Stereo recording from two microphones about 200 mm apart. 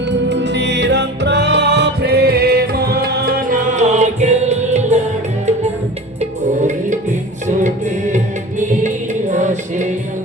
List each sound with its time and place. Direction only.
0.1 s music: 60° right (ahead or behind); by 4.9 s 35° right (ahead or behind)
6.1 s music: 40° right (ahead or behind)
9.3 s music: 35° right (ahead or behind)